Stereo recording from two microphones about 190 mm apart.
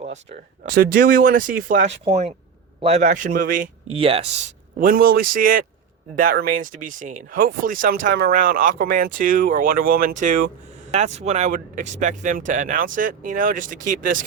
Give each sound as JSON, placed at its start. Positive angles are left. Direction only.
{"t": 0.0, "sound": "a man's voice", "side_deg": -40}
{"t": 3.9, "sound": "speech", "side_deg": -30}
{"t": 4.8, "sound": "speech", "side_deg": -50}